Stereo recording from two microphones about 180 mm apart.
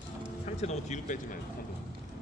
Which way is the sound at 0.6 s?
40° left (ahead or behind).